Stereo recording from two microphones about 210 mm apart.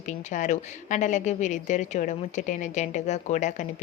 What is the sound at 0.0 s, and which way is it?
A woman's voice, 35° left (ahead or behind).